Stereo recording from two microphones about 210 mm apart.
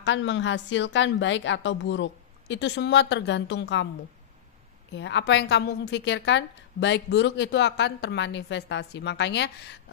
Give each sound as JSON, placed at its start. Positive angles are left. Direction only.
{"t": 0.0, "sound": "a woman's voice", "side_deg": 60}
{"t": 4.9, "sound": "a woman's voice", "side_deg": 60}